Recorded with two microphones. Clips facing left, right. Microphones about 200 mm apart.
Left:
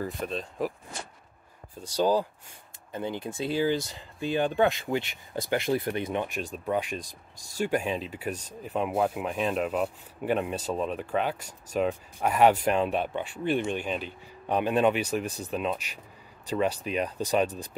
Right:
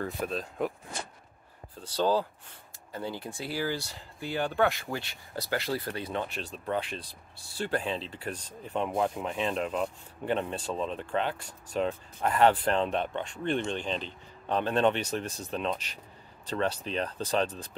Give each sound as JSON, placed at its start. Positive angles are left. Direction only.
{"t": 0.0, "sound": "speech", "side_deg": 0}
{"t": 1.8, "sound": "speech", "side_deg": 10}